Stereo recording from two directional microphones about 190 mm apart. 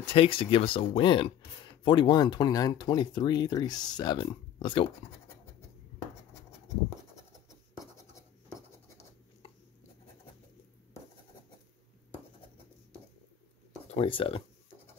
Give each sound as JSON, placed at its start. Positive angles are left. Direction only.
{"t": 0.1, "sound": "speech", "side_deg": 30}
{"t": 13.8, "sound": "speech", "side_deg": 30}